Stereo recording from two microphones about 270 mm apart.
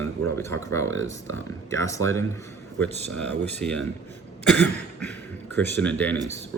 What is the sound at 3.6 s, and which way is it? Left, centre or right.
Cough, centre.